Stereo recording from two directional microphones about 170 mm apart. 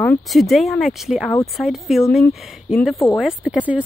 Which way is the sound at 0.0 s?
5° left (ahead or behind).